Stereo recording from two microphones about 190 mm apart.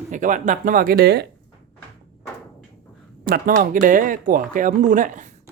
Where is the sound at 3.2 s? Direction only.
50° right (ahead or behind).